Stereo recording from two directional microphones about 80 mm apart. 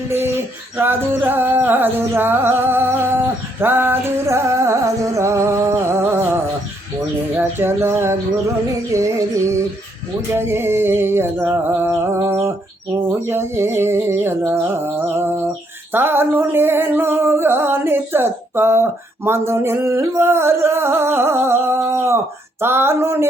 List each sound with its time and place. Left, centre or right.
0.1 s music: right
7.3 s music: right
11.9 s music: right